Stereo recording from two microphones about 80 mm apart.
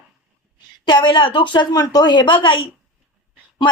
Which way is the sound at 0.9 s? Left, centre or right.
Left.